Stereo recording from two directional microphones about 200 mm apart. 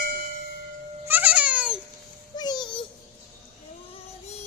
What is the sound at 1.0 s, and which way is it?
Babbling, 10° right (ahead or behind).